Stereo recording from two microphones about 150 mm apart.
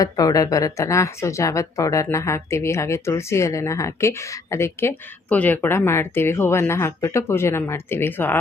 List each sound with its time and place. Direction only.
0.0 s a woman's voice: 25° left (ahead or behind)